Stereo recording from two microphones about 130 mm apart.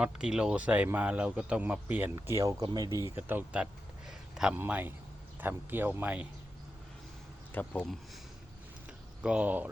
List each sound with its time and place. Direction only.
0.0 s a man's voice: 5° right (ahead or behind); by 3.0 s 30° right (ahead or behind)
3.2 s a sound: 15° right (ahead or behind)
4.5 s a man's voice: 15° right (ahead or behind)
7.5 s speech: 10° left (ahead or behind)
9.2 s a man's voice: 10° right (ahead or behind)